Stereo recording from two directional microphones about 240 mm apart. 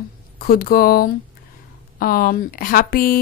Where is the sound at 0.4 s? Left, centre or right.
Left.